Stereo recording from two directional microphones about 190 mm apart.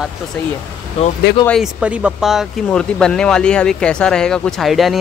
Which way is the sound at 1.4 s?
Centre (ahead or behind).